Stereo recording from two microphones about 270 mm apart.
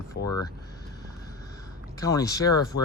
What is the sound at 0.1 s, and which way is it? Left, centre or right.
Speech, left.